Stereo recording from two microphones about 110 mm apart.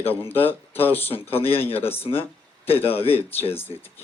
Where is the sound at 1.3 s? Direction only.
60° left (ahead or behind).